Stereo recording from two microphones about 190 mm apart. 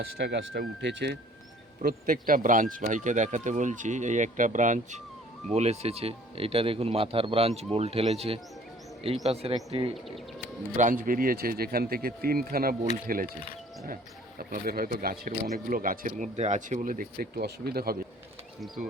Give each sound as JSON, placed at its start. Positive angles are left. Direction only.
{"t": 0.2, "sound": "speech", "side_deg": -70}
{"t": 1.8, "sound": "speech", "side_deg": -50}
{"t": 10.8, "sound": "speech", "side_deg": -45}